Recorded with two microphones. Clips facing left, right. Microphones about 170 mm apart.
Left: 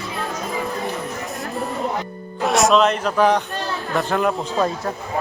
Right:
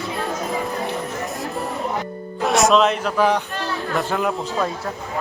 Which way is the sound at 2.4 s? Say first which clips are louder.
Even; centre (ahead or behind).